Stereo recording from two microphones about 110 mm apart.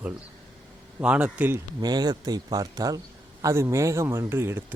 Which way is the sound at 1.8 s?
35° right (ahead or behind).